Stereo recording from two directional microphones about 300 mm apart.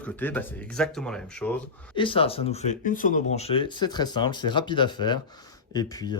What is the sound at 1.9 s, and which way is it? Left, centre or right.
Speech, centre.